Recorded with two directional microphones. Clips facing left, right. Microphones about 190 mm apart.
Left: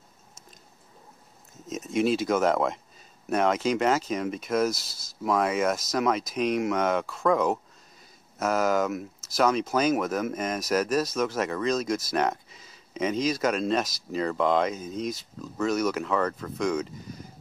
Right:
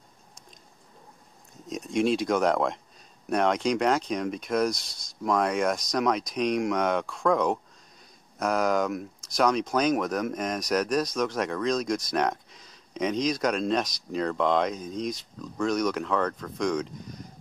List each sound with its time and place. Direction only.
1.5 s speech: 5° left (ahead or behind)